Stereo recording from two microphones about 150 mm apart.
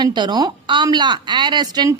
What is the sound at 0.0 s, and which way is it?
Speech, 30° right (ahead or behind).